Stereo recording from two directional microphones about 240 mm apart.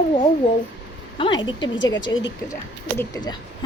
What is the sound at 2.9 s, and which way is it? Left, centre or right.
Speech, centre.